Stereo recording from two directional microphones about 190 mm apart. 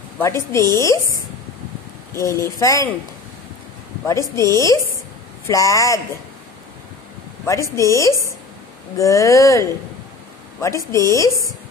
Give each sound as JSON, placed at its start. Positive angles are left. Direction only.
{"t": 0.2, "sound": "a woman's voice", "side_deg": 15}
{"t": 2.1, "sound": "a woman's voice", "side_deg": 15}
{"t": 4.1, "sound": "a woman's voice", "side_deg": 15}
{"t": 7.7, "sound": "a woman's voice", "side_deg": 15}